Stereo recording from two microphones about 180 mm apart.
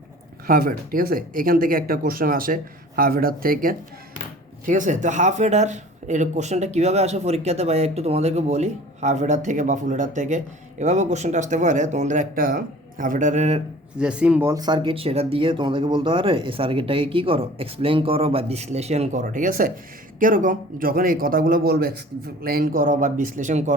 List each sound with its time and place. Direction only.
0.4 s a man's voice: 55° right (ahead or behind)
14.0 s speech: 5° right (ahead or behind)
14.5 s a man's voice: 25° right (ahead or behind); by 23.7 s 40° right (ahead or behind)